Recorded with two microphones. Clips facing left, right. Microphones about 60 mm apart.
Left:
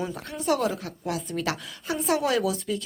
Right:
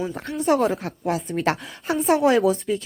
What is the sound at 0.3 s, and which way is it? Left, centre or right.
Speech, right.